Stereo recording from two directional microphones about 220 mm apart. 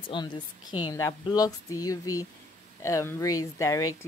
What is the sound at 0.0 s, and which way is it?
Speech, 20° left (ahead or behind).